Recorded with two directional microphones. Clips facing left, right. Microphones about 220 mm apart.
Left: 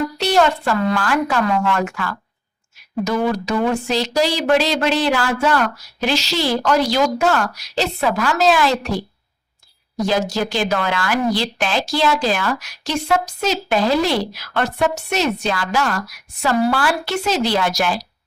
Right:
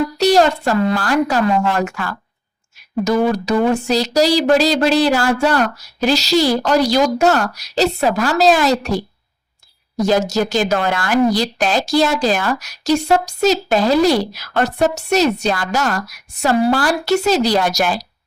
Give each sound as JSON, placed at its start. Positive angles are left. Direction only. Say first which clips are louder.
{"t": 0.2, "sound": "speech", "louder": "right 4 dB", "side_deg": -40}
{"t": 10.1, "sound": "speech", "louder": "right 4 dB", "side_deg": -45}